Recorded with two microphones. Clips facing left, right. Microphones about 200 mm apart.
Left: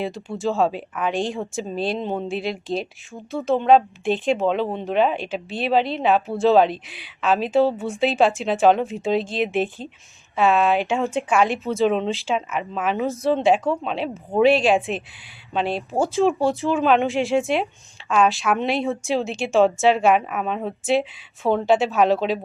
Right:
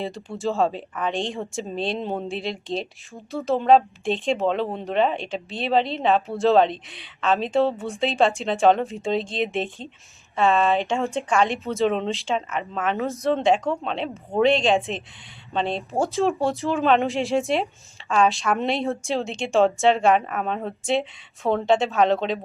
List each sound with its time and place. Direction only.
0.0 s speech: centre (ahead or behind)